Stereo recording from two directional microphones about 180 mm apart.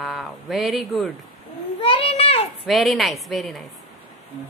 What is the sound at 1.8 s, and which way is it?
Speech, 30° left (ahead or behind).